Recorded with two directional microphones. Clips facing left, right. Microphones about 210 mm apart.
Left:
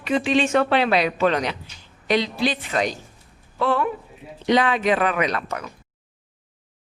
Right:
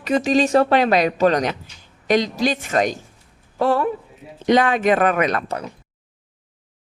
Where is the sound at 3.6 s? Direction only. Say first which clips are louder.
Right 3 dB; 40° right (ahead or behind).